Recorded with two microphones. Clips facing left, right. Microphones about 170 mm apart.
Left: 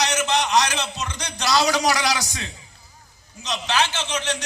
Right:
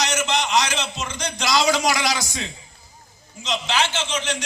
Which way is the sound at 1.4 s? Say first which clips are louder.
Even; 15° right (ahead or behind).